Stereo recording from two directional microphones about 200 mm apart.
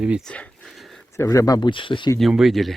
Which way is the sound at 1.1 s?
15° left (ahead or behind).